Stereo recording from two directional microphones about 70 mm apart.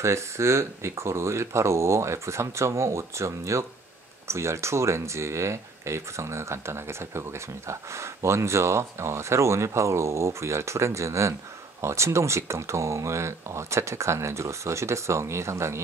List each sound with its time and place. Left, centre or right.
0.0 s speech: right